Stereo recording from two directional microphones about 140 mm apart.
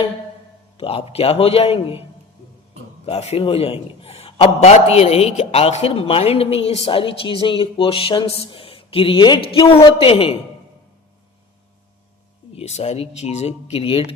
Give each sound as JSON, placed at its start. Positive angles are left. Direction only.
{"t": 0.8, "sound": "a man's voice", "side_deg": 45}
{"t": 3.1, "sound": "a man's voice", "side_deg": 45}
{"t": 12.5, "sound": "a man's voice", "side_deg": 50}